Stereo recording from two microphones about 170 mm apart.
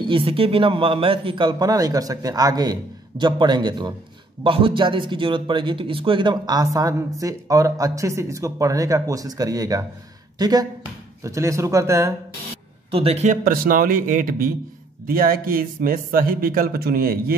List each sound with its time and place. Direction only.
0.1 s a man's voice: 35° right (ahead or behind); by 12.2 s 15° right (ahead or behind)
12.9 s a man's voice: 35° right (ahead or behind)
13.4 s a man's voice: 55° right (ahead or behind)